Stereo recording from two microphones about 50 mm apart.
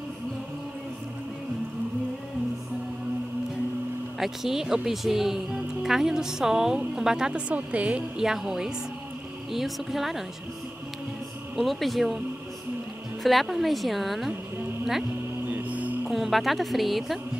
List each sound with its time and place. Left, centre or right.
4.2 s speech: centre
7.3 s a woman's voice: right
8.2 s speech: centre
11.5 s speech: centre
13.2 s speech: centre
15.4 s music: right
16.1 s speech: centre